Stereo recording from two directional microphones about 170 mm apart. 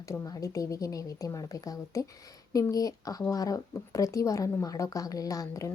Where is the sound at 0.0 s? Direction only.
20° left (ahead or behind).